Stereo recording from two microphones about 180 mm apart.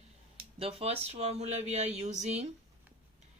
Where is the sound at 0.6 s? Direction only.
35° right (ahead or behind).